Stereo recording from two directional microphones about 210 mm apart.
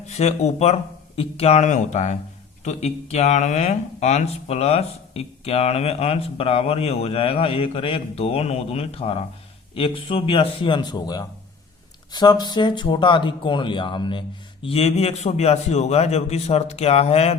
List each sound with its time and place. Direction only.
0.1 s speech: 30° left (ahead or behind)